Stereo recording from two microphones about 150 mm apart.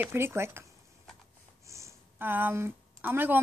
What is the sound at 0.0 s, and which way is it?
Speech, 15° right (ahead or behind).